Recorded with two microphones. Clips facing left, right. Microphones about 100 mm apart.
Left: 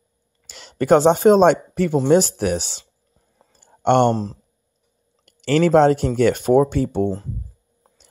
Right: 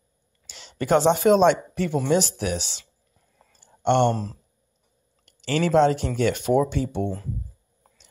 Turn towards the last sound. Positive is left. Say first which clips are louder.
# left 6 dB
turn(degrees=40)  # may be behind; listen again after turning